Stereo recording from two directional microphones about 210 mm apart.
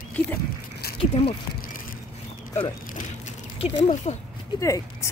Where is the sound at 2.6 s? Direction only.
35° left (ahead or behind).